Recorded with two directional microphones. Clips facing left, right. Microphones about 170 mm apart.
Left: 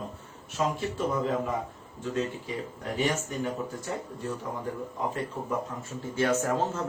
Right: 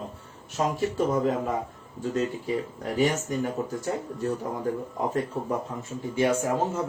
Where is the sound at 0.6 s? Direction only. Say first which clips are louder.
Right 2 dB; 40° right (ahead or behind).